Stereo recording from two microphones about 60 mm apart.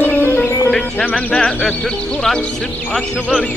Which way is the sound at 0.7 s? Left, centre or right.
Centre.